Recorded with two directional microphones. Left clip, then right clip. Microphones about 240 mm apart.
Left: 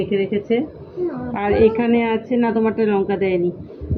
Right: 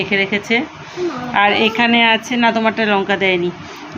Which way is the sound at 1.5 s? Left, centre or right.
Right.